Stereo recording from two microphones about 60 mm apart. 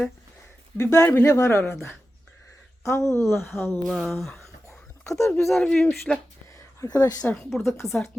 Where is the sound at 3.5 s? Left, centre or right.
Left.